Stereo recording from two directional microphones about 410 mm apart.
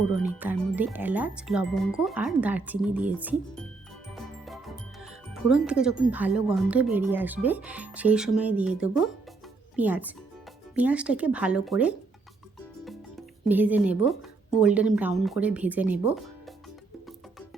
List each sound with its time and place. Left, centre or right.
0.3 s speech: centre
4.1 s music: centre
5.3 s speech: centre